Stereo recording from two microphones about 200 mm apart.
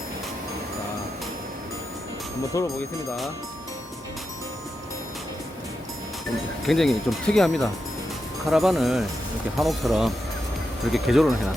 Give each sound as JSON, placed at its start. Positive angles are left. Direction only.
{"t": 2.5, "sound": "speech", "side_deg": 15}
{"t": 6.7, "sound": "speech", "side_deg": 0}